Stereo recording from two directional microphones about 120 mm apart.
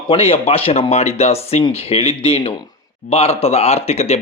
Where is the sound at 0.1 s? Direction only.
55° left (ahead or behind).